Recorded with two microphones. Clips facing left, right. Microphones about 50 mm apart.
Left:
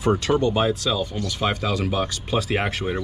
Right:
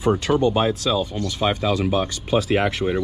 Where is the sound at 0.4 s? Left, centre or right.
Centre.